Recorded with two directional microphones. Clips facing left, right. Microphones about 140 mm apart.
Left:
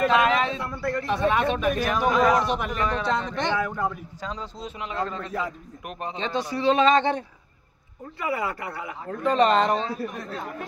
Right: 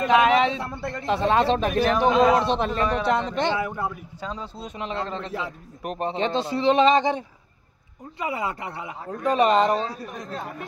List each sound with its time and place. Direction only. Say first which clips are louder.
0.0 s speech: right 2 dB; 25° right (ahead or behind)
4.7 s speech: right 1 dB; 30° right (ahead or behind)
9.2 s a woman's voice: right 1 dB; 10° right (ahead or behind)